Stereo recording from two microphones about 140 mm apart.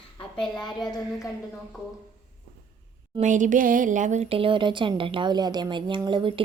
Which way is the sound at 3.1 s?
65° right (ahead or behind).